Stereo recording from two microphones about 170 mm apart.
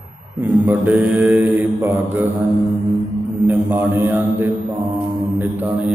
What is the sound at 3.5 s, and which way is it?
Mantra, 10° right (ahead or behind).